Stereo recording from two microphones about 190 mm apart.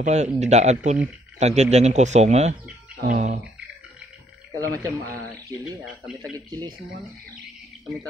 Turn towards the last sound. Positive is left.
turn(degrees=-20)  # may be behind; listen again after turning